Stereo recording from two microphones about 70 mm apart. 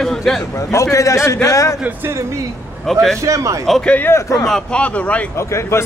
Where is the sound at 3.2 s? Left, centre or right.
Right.